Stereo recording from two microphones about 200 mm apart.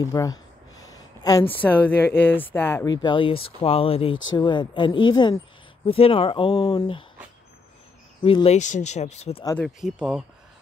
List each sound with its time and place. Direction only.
0.0 s speech: 15° left (ahead or behind)
4.1 s speech: 75° left (ahead or behind)
4.4 s speech: 25° left (ahead or behind)
8.2 s speech: 30° left (ahead or behind)
9.6 s speech: 5° right (ahead or behind)